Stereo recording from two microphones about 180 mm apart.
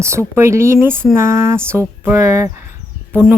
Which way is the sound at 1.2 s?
15° right (ahead or behind).